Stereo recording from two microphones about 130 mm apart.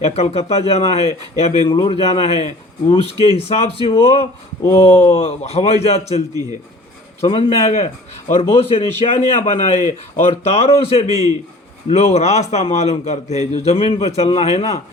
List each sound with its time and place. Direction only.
0.0 s a man's voice: 55° left (ahead or behind)
1.7 s a man's voice: 40° left (ahead or behind); by 14.8 s 55° left (ahead or behind)